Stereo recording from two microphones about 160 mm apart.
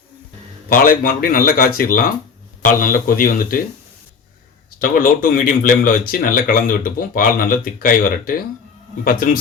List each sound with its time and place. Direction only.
0.7 s speech: 60° left (ahead or behind)
4.8 s speech: 60° left (ahead or behind)